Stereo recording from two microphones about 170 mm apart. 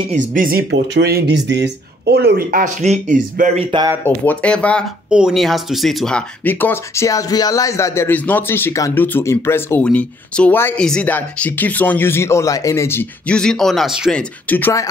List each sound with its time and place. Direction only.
0.3 s speech: 55° right (ahead or behind)
4.0 s speech: 10° left (ahead or behind)
14.5 s speech: 15° left (ahead or behind)